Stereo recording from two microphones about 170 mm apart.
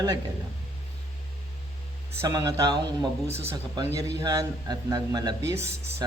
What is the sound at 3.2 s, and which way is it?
Speech, 40° right (ahead or behind).